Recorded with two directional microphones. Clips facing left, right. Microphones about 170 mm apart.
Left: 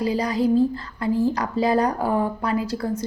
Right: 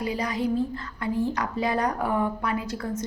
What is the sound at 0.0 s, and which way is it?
A woman's voice, 35° left (ahead or behind).